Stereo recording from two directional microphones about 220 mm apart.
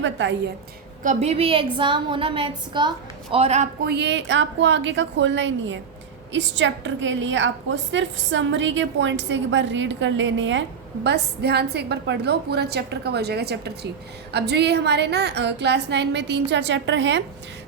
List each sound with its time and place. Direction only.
0.0 s a woman's voice: 50° right (ahead or behind)
1.0 s a woman's voice: 30° right (ahead or behind)
3.8 s a woman's voice: 50° right (ahead or behind)